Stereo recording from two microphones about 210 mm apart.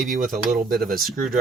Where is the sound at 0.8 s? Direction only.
40° right (ahead or behind).